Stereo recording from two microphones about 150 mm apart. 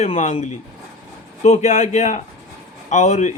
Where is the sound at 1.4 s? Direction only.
50° left (ahead or behind).